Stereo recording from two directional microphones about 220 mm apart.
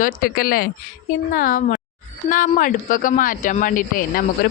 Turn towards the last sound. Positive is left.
turn(degrees=40)  # may be behind; listen again after turning